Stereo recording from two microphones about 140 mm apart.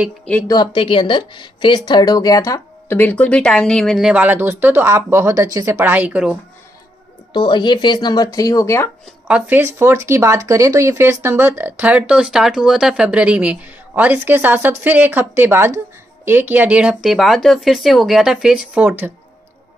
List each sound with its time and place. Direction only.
0.5 s speech: 35° left (ahead or behind)
2.9 s speech: 10° left (ahead or behind)
4.1 s speech: 10° right (ahead or behind)
5.8 s speech: 10° right (ahead or behind)
7.3 s speech: 35° left (ahead or behind)
9.3 s speech: 15° right (ahead or behind)